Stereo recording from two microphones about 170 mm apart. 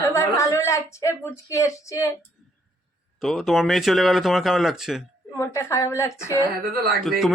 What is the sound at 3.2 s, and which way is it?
A man's voice, centre (ahead or behind).